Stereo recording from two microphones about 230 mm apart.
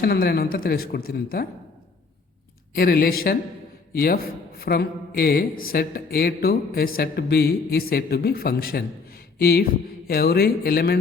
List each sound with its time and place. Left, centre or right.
0.0 s a man's voice: left
2.7 s a man's voice: left